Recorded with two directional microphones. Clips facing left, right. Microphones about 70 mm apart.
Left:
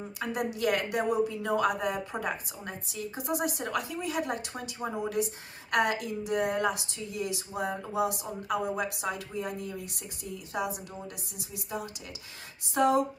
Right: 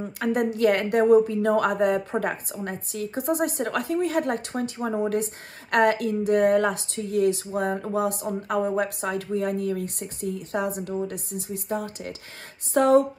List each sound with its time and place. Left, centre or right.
0.2 s speech: right